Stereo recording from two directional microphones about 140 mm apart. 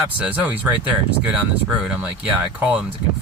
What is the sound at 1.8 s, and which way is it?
Speech, 10° right (ahead or behind).